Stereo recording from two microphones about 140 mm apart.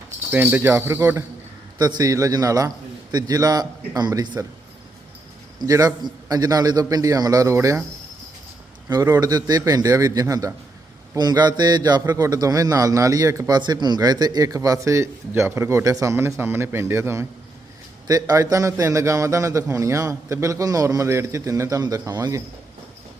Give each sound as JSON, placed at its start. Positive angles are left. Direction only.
{"t": 0.3, "sound": "speech", "side_deg": -15}
{"t": 1.8, "sound": "a man's voice", "side_deg": -30}
{"t": 5.5, "sound": "a man's voice", "side_deg": -25}
{"t": 8.9, "sound": "a man's voice", "side_deg": -25}